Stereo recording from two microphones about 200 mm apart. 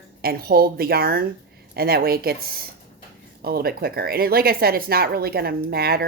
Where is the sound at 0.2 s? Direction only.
50° right (ahead or behind).